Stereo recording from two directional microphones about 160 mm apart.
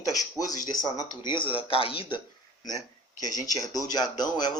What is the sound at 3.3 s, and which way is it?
Speech, 25° left (ahead or behind).